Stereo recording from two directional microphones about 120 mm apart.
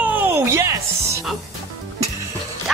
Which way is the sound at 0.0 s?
15° right (ahead or behind).